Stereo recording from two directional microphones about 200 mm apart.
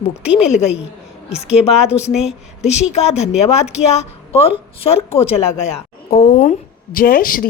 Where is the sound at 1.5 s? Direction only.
30° left (ahead or behind).